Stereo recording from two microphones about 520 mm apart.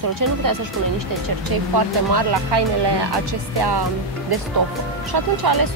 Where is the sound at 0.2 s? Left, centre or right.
Right.